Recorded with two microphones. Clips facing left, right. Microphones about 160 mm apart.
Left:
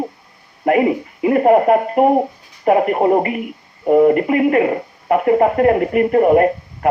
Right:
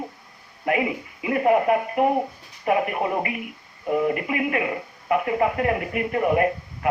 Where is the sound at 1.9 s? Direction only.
30° left (ahead or behind).